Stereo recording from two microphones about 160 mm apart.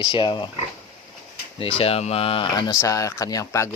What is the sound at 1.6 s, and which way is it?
Speech, 35° left (ahead or behind).